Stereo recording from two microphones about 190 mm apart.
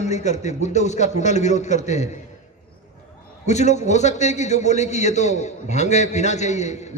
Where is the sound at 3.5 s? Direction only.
35° left (ahead or behind).